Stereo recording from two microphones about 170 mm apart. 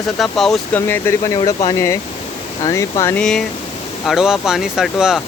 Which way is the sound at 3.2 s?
5° left (ahead or behind).